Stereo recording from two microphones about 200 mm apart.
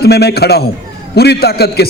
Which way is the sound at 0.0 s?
55° left (ahead or behind).